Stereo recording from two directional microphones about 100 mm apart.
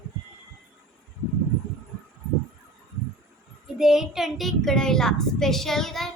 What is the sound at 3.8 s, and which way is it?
A child's voice, 5° right (ahead or behind).